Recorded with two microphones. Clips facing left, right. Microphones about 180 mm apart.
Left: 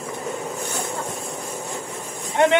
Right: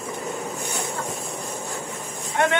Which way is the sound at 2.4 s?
20° left (ahead or behind).